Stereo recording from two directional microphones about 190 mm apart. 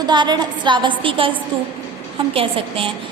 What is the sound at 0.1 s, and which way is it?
A woman's voice, 25° right (ahead or behind).